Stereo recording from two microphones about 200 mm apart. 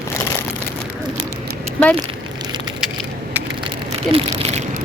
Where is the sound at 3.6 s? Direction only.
30° right (ahead or behind).